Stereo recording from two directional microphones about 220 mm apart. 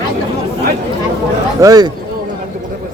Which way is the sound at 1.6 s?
15° right (ahead or behind).